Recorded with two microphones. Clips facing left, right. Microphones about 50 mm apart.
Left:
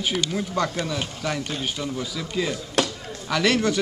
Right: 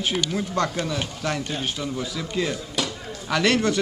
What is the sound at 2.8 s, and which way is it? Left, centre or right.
Chop, left.